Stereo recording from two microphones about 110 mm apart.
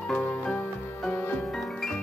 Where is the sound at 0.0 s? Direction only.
10° left (ahead or behind).